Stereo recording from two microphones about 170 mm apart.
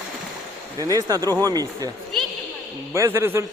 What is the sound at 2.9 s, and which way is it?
Speech, 20° right (ahead or behind).